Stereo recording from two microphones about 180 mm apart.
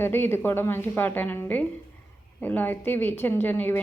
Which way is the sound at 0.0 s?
15° left (ahead or behind).